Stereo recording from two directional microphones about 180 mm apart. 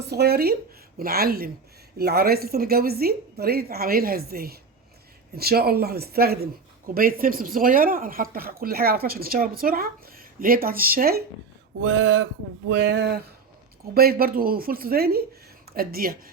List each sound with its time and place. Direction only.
0.1 s a woman's voice: 65° right (ahead or behind)
11.8 s a sound: 70° right (ahead or behind)
12.7 s a woman's voice: 65° right (ahead or behind)